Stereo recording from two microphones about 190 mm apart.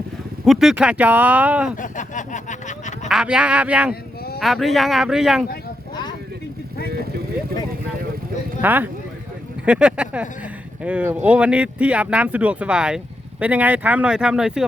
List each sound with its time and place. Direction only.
0.4 s speech: centre (ahead or behind)
1.7 s speech: 40° left (ahead or behind)
3.1 s speech: 5° right (ahead or behind)
8.6 s speech: 10° right (ahead or behind)